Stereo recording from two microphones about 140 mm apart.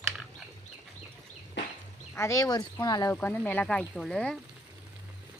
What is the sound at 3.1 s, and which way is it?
Speech, 15° left (ahead or behind).